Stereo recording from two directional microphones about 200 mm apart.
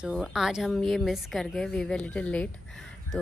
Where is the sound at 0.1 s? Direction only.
Centre (ahead or behind).